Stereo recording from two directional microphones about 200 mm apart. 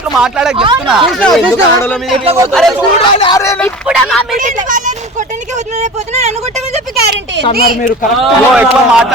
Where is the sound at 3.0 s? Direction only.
20° left (ahead or behind).